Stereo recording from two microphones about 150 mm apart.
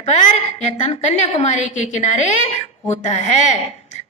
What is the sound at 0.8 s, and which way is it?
A woman's voice, 45° left (ahead or behind).